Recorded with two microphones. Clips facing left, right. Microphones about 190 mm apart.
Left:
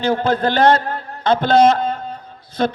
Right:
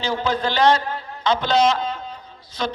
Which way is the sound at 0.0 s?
55° left (ahead or behind).